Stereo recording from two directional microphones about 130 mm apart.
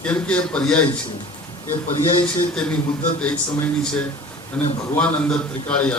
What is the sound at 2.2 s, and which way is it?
Speech, 10° left (ahead or behind).